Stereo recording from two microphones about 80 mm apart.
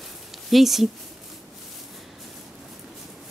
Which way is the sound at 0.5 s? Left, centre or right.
Centre.